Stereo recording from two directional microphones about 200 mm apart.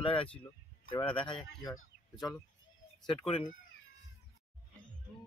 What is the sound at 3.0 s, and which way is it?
Speech, 30° left (ahead or behind).